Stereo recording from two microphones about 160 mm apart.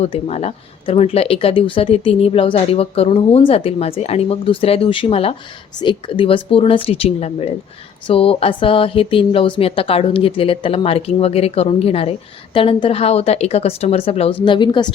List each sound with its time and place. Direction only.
0.0 s speech: 40° left (ahead or behind)